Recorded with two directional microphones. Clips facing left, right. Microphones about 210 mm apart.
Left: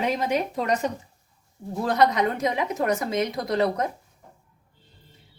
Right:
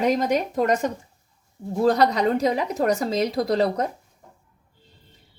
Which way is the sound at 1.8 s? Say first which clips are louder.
Right 2 dB; 35° right (ahead or behind).